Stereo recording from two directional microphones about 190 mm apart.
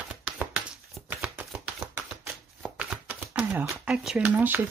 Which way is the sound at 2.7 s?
5° right (ahead or behind).